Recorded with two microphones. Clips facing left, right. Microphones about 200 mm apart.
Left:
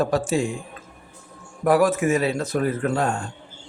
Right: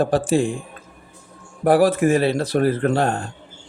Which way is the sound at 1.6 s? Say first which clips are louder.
Right 3 dB; 35° right (ahead or behind).